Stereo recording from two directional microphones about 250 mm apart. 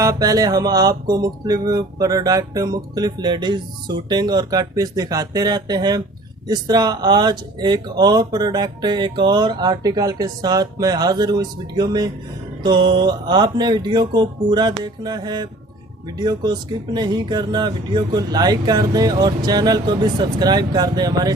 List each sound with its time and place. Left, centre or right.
0.0 s music: centre